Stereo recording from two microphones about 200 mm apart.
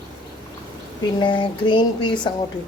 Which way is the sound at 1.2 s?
25° left (ahead or behind).